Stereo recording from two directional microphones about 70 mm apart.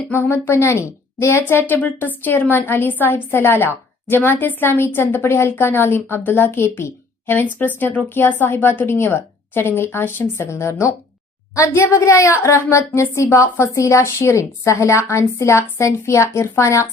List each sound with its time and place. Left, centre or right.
0.1 s a woman's voice: left